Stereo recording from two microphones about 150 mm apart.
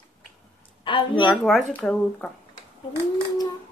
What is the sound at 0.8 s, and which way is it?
Speech, 35° left (ahead or behind).